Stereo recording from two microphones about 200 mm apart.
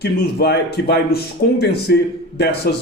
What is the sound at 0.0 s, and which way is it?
A man's voice, 55° left (ahead or behind).